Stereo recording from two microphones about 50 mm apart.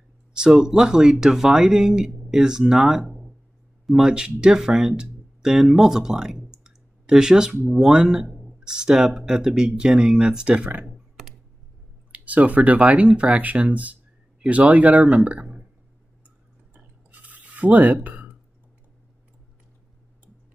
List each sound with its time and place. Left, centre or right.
0.3 s speech: centre
10.6 s speech: right
12.1 s speech: right
16.7 s a sound: right